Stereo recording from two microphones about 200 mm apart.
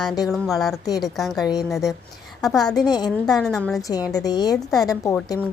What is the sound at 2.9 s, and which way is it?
Speech, 20° left (ahead or behind).